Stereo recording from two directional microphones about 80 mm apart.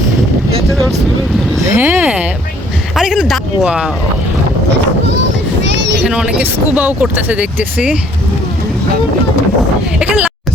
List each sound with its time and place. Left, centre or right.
1.7 s a sound: right
2.9 s speech: centre
6.1 s speech: centre
6.4 s speech: right
10.0 s speech: centre